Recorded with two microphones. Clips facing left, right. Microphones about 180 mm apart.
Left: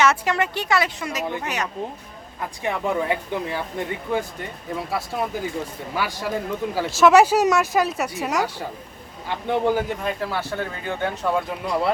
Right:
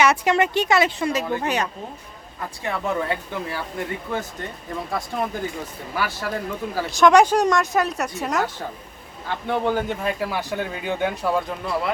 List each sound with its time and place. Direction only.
0.0 s speech: 15° right (ahead or behind)
2.6 s speech: 15° left (ahead or behind)
6.0 s speech: 15° left (ahead or behind)
6.9 s speech: 5° left (ahead or behind)
9.2 s speech: 15° left (ahead or behind)
9.8 s speech: centre (ahead or behind)